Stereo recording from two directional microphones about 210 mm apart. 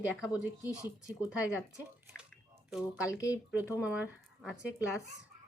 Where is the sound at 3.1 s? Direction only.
15° left (ahead or behind).